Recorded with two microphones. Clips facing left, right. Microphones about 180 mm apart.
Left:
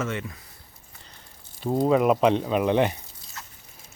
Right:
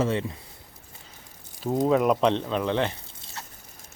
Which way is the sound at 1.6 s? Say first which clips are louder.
Left 1 dB; centre (ahead or behind).